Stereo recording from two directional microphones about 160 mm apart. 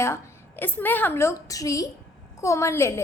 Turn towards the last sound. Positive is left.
turn(degrees=15)  # may be behind; listen again after turning